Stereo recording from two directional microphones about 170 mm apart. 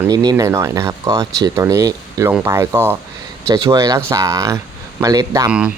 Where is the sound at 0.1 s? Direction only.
20° right (ahead or behind).